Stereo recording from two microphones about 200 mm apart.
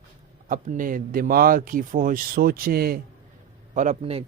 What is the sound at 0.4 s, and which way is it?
Speech, 40° right (ahead or behind).